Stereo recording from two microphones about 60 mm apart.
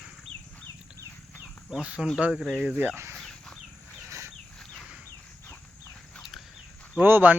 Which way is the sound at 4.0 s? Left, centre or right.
Right.